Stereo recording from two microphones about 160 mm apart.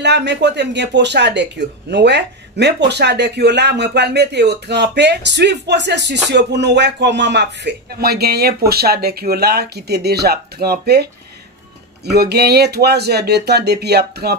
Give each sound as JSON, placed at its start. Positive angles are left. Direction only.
{"t": 0.0, "sound": "speech", "side_deg": -90}